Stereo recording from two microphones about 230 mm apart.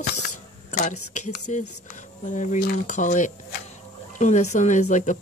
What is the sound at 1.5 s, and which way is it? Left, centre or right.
Speech, left.